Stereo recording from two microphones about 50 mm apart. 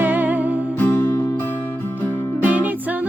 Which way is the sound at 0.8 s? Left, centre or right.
Left.